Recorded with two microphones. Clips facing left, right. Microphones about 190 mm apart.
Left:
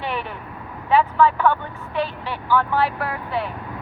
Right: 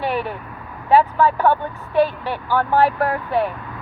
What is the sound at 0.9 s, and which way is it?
Speech, 40° right (ahead or behind).